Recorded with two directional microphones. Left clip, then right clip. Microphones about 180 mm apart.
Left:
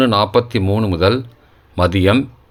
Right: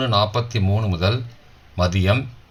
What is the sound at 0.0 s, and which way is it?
Speech, 45° left (ahead or behind).